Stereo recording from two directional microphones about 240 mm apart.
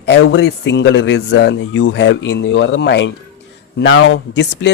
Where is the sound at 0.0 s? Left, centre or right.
Left.